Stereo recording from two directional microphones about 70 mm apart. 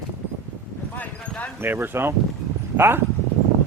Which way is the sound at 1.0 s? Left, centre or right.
Left.